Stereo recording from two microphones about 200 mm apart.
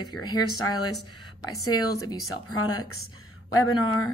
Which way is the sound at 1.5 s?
90° left.